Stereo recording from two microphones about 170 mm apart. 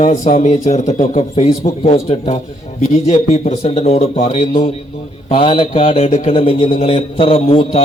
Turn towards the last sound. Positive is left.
turn(degrees=35)  # may be behind; listen again after turning